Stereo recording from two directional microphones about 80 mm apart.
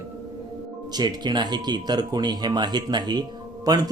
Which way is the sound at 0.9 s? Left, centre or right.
Right.